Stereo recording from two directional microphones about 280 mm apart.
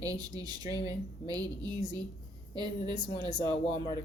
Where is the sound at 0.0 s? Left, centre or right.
Centre.